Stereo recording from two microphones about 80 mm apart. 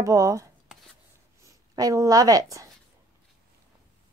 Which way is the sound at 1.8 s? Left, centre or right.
Right.